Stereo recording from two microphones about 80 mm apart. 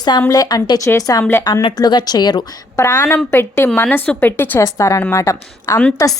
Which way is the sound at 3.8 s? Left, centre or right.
Left.